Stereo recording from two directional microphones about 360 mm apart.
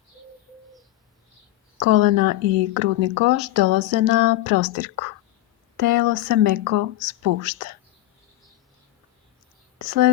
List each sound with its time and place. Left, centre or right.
1.8 s speech: right
9.7 s speech: right